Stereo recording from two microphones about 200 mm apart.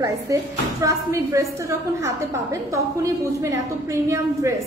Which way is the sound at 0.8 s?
15° right (ahead or behind).